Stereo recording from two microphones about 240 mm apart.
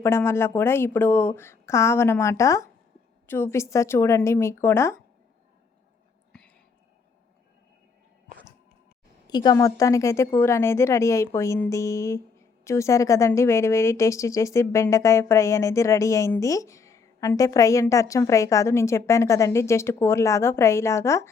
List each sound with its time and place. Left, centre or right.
0.0 s a woman's voice: centre
6.3 s whispering: centre
9.2 s a woman's voice: centre